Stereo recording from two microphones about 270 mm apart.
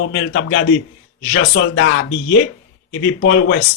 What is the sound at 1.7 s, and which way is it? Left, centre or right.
Speech, left.